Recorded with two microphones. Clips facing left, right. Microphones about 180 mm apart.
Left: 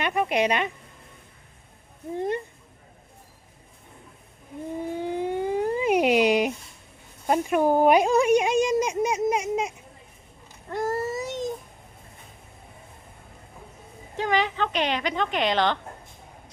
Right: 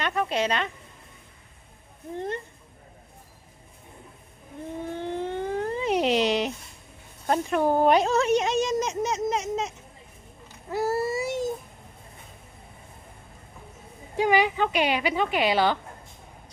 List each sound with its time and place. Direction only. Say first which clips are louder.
0.0 s a woman's voice: left 2 dB; 15° left (ahead or behind)
2.1 s speech: left 4 dB; 15° left (ahead or behind)
4.9 s a sound: left 3 dB; 10° left (ahead or behind)
7.3 s speech: left 2 dB; 10° left (ahead or behind)
10.7 s a sound: right 1 dB; 5° right (ahead or behind)
14.2 s a woman's voice: right 3 dB; 10° right (ahead or behind)